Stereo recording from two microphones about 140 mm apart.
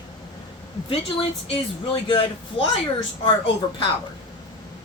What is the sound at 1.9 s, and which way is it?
Speech, 40° left (ahead or behind).